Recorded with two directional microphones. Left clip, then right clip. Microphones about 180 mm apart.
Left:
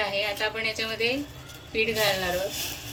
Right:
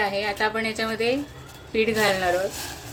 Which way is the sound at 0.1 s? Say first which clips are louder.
Right 3 dB; 40° right (ahead or behind).